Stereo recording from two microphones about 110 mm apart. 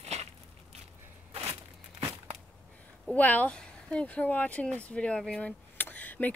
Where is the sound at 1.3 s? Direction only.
65° right (ahead or behind).